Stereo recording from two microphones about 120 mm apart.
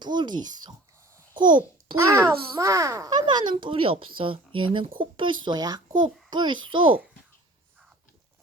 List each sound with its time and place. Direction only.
0.0 s a child's voice: 40° right (ahead or behind)
2.0 s a child's voice: 20° right (ahead or behind); by 6.9 s 45° right (ahead or behind)